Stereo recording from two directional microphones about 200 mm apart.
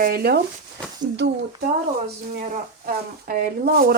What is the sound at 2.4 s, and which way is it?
Speech, 45° right (ahead or behind).